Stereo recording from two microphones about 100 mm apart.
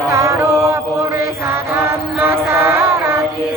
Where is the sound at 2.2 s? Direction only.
25° right (ahead or behind).